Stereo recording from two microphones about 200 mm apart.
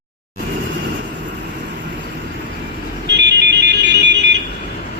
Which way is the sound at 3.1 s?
60° right (ahead or behind).